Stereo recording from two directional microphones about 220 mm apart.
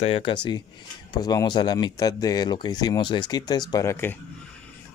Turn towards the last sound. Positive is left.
turn(degrees=10)  # may be behind; listen again after turning